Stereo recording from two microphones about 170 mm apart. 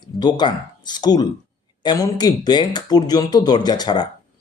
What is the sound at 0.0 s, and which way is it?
Speech, 25° left (ahead or behind).